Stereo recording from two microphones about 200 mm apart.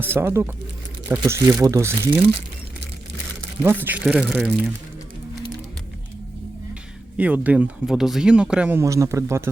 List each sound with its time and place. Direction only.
0.0 s speech: 10° right (ahead or behind)
3.6 s speech: 10° right (ahead or behind)
7.2 s speech: 5° right (ahead or behind)
8.8 s speech: 15° right (ahead or behind)